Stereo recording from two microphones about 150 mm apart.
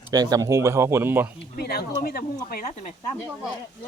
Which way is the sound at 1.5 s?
90° left.